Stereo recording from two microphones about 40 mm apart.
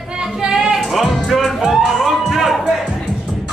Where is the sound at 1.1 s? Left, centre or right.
Centre.